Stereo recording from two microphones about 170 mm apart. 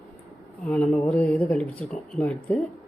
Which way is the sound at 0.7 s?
5° left (ahead or behind).